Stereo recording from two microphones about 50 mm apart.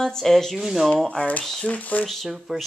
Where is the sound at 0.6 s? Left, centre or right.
Centre.